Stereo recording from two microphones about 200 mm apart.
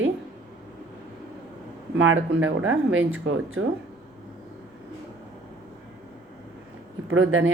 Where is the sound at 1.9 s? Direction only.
80° right.